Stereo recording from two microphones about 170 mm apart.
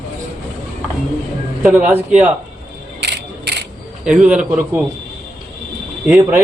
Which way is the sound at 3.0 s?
80° right.